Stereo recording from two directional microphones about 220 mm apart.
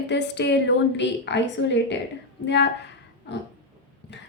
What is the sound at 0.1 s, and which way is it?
Speech, 50° left (ahead or behind).